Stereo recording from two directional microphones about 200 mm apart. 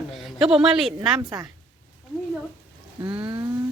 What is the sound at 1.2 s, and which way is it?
Speech, 20° right (ahead or behind).